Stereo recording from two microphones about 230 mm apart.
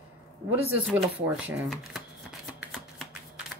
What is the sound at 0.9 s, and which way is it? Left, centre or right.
Shuffling cards, centre.